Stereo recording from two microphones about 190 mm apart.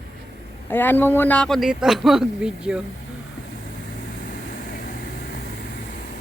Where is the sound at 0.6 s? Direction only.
10° left (ahead or behind); by 2.8 s 5° right (ahead or behind).